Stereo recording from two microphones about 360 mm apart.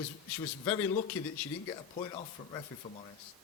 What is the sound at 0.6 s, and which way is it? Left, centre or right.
Speech, centre.